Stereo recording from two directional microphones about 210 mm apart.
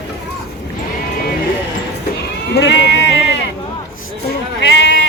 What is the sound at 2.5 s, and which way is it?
Sheep, 55° left (ahead or behind).